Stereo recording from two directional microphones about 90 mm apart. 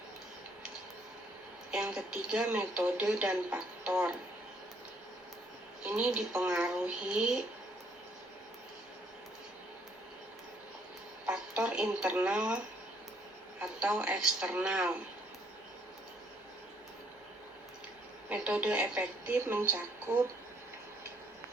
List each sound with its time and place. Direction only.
1.7 s speech: 10° right (ahead or behind)
5.8 s speech: 10° right (ahead or behind)
11.3 s a sound: 10° right (ahead or behind)
12.2 s speech: 10° right (ahead or behind)
13.6 s speech: 10° right (ahead or behind)
18.3 s speech: 15° right (ahead or behind)